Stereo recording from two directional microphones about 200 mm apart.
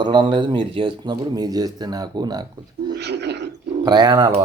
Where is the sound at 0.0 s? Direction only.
25° right (ahead or behind).